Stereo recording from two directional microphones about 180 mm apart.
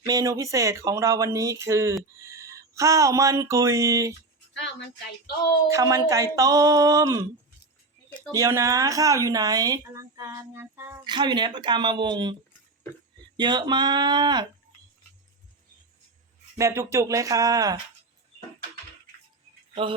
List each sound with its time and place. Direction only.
0.0 s a woman's voice: 20° right (ahead or behind)
5.6 s a woman's voice: 15° right (ahead or behind)
8.3 s a woman's voice: 15° right (ahead or behind)
16.6 s speech: 15° right (ahead or behind)